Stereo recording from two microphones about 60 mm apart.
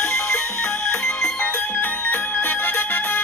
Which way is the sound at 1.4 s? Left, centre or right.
Left.